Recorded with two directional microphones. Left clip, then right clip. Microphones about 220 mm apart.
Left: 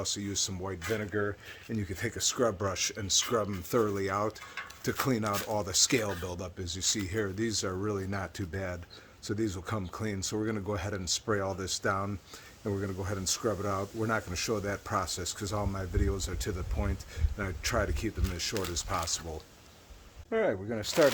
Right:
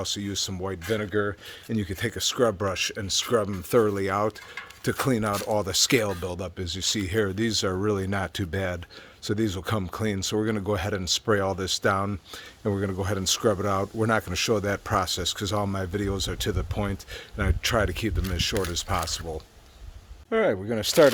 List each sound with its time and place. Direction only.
0.0 s speech: 35° right (ahead or behind)
20.3 s speech: 45° right (ahead or behind)